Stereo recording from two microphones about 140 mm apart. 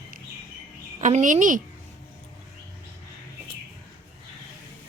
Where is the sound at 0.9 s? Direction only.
55° right (ahead or behind).